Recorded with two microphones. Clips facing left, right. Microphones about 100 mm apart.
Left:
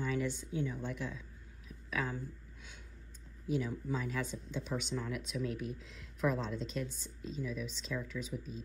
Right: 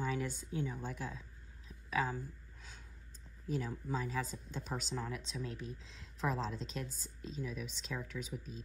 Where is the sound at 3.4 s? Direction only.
40° right (ahead or behind).